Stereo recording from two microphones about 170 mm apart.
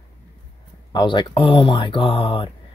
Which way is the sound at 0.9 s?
25° left (ahead or behind).